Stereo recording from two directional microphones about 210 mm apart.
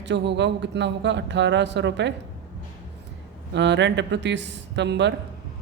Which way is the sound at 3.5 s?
55° right (ahead or behind).